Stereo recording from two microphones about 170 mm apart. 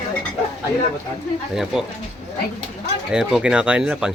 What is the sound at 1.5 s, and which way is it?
Speech, centre (ahead or behind).